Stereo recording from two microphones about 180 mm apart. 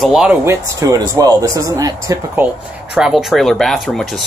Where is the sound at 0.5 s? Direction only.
20° right (ahead or behind).